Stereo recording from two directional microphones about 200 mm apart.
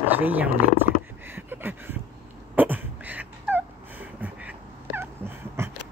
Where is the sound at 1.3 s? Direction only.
10° right (ahead or behind).